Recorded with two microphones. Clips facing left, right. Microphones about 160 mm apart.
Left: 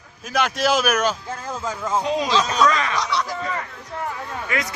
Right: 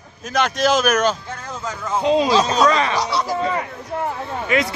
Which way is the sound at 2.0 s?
20° right (ahead or behind).